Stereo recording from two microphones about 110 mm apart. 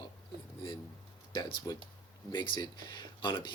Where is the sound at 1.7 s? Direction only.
40° left (ahead or behind).